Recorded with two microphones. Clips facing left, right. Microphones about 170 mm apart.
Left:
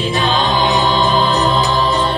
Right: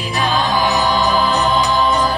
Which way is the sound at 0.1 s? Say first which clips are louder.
Right 1 dB; 25° left (ahead or behind).